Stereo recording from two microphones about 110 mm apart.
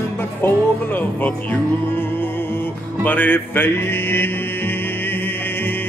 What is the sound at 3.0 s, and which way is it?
Music, 15° left (ahead or behind).